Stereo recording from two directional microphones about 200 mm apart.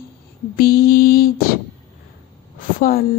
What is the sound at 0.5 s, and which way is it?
Speech, 50° left (ahead or behind).